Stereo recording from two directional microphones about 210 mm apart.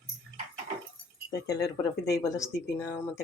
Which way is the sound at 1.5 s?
15° left (ahead or behind).